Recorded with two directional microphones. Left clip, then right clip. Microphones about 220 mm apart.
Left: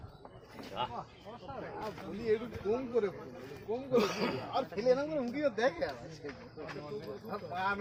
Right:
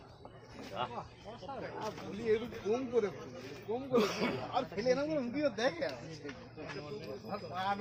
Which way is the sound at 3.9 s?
35° left (ahead or behind).